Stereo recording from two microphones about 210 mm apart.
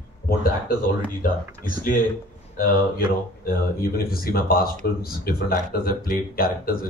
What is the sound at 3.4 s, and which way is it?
Speech, 45° left (ahead or behind).